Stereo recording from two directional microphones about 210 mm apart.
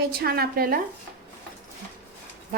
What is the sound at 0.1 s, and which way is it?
Speech, 50° right (ahead or behind).